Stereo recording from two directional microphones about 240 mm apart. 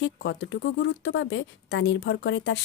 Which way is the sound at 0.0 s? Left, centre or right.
Left.